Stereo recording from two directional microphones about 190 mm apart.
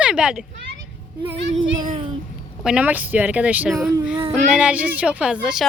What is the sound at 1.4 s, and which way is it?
Speech, 75° right (ahead or behind).